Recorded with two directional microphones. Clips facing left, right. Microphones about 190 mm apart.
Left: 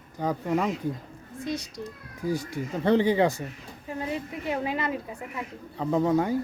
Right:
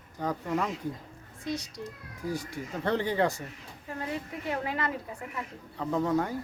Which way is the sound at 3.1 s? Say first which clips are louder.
Left 4 dB; 20° left (ahead or behind).